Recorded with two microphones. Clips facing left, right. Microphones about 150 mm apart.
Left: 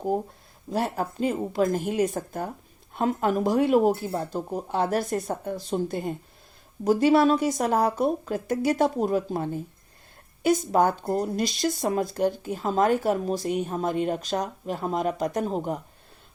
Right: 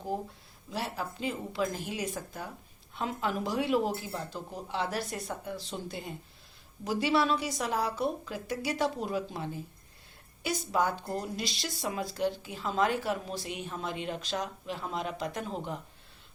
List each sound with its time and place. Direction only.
0.7 s speech: 45° left (ahead or behind)